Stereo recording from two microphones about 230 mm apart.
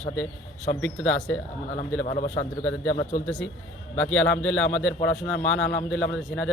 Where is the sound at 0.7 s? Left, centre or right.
Centre.